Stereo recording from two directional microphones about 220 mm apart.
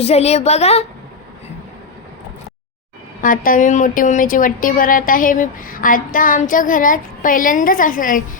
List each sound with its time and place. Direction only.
0.0 s a woman's voice: 30° left (ahead or behind)
3.2 s a woman's voice: 40° left (ahead or behind)